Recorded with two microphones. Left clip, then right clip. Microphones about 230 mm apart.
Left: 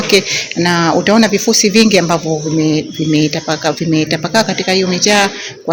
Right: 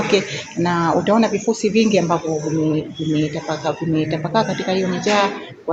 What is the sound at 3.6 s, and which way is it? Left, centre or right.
Speech, left.